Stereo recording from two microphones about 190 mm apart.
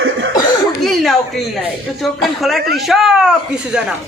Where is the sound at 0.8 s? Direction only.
Centre (ahead or behind).